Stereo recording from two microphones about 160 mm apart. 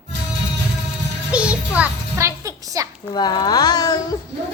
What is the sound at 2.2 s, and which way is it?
Speech, 20° right (ahead or behind).